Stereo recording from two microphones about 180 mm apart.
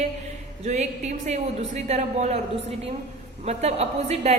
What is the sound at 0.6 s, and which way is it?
A woman's voice, 40° right (ahead or behind).